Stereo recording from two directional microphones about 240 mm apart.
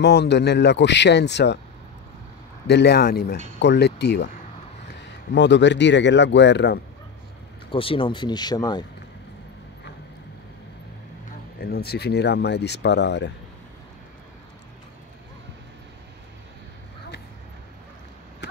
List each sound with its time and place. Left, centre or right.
0.0 s speech: left
2.6 s speech: left
5.3 s speech: left
7.7 s speech: left
11.6 s speech: left